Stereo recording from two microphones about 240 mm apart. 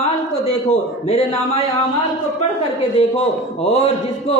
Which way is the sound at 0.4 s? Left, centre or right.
Left.